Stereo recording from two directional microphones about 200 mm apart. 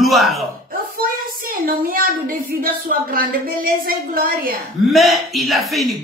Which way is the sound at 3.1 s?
45° right (ahead or behind).